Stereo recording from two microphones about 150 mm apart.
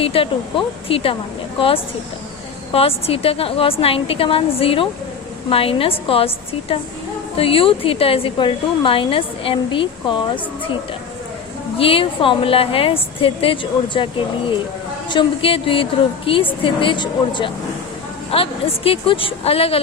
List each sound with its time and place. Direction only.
0.0 s a woman's voice: 35° left (ahead or behind)
11.8 s a woman's voice: 40° left (ahead or behind)